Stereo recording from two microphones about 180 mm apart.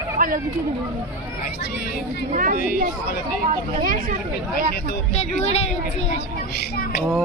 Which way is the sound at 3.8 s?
50° right (ahead or behind).